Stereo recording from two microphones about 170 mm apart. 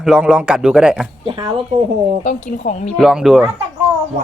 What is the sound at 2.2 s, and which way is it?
Speech, 45° left (ahead or behind).